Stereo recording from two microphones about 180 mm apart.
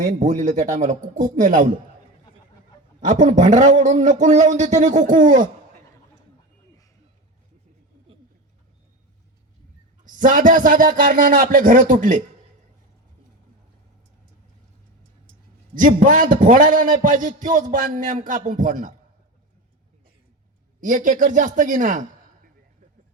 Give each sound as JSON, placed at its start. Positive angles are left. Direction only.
{"t": 0.0, "sound": "a man's voice", "side_deg": -45}
{"t": 3.0, "sound": "a man's voice", "side_deg": -45}
{"t": 10.0, "sound": "a man's voice", "side_deg": -45}
{"t": 15.7, "sound": "a man's voice", "side_deg": -50}
{"t": 20.8, "sound": "a man's voice", "side_deg": -45}